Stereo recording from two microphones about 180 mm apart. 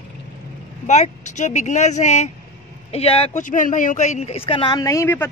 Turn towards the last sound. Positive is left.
turn(degrees=15)  # may be behind; listen again after turning